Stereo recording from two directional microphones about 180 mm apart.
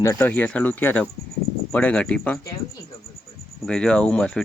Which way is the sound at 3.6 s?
5° left (ahead or behind).